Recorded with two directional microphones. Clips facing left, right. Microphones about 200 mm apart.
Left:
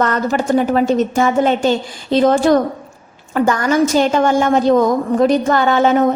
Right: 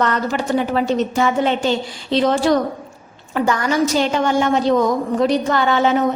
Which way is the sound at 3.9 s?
45° left (ahead or behind).